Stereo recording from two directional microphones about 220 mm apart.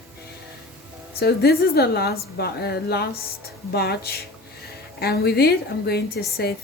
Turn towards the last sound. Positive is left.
turn(degrees=45)  # may be behind; listen again after turning